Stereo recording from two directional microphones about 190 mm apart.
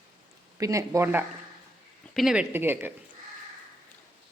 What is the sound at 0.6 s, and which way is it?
Speech, 15° right (ahead or behind).